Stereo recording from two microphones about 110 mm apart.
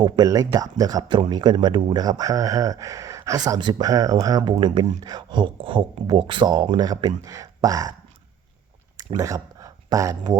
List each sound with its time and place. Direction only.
0.3 s speech: 35° right (ahead or behind)
9.1 s speech: 30° right (ahead or behind)